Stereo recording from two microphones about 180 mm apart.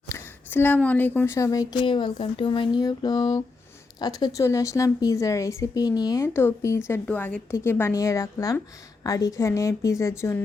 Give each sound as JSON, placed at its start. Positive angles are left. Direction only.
{"t": 0.1, "sound": "a woman's voice", "side_deg": 10}